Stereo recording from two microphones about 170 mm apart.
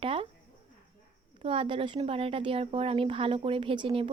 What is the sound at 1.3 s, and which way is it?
Speech, 35° right (ahead or behind).